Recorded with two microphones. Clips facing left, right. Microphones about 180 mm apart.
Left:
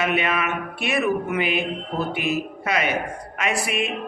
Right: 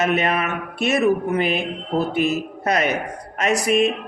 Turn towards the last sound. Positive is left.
turn(degrees=-40)  # may be behind; listen again after turning